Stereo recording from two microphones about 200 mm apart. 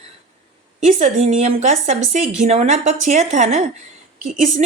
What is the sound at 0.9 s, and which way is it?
A woman's voice, 35° right (ahead or behind).